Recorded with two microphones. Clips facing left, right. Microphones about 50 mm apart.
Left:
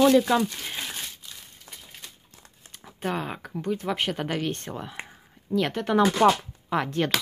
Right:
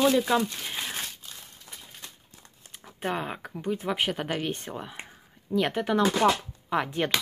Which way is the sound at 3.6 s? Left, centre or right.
Centre.